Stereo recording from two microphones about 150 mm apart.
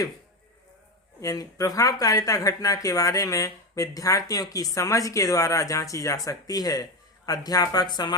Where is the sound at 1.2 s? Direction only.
20° left (ahead or behind).